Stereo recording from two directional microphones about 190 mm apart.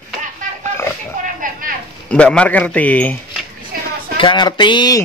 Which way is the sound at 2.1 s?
5° left (ahead or behind).